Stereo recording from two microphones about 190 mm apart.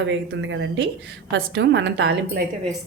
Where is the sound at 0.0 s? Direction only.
75° right (ahead or behind).